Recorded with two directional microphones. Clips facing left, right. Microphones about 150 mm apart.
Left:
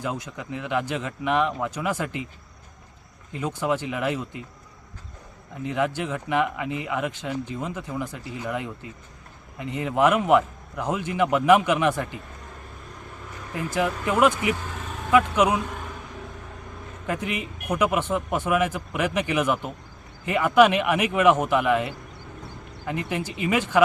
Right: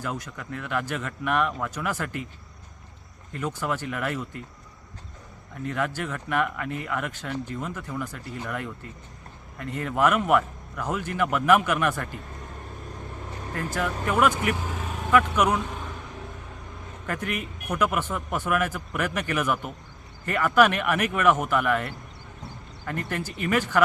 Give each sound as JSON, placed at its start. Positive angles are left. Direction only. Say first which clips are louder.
{"t": 0.0, "sound": "speech", "louder": "left 2 dB", "side_deg": 15}
{"t": 3.3, "sound": "speech", "louder": "left 3 dB", "side_deg": 15}
{"t": 5.6, "sound": "speech", "louder": "left 3 dB", "side_deg": 15}
{"t": 13.6, "sound": "speech", "louder": "left 3 dB", "side_deg": 15}
{"t": 17.7, "sound": "speech", "louder": "left 3 dB", "side_deg": 15}